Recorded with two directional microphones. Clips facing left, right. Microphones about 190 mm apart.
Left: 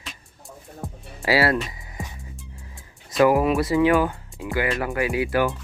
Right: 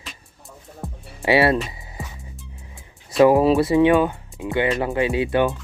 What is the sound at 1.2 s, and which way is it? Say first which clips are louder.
Speech: right 3 dB; 25° right (ahead or behind).